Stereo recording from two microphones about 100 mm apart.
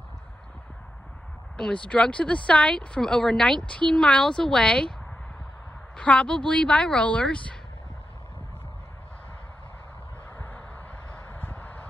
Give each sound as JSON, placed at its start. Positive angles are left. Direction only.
{"t": 1.6, "sound": "speech", "side_deg": 10}
{"t": 5.9, "sound": "speech", "side_deg": 10}
{"t": 10.3, "sound": "vehicle", "side_deg": 20}
{"t": 11.1, "sound": "a sound", "side_deg": 20}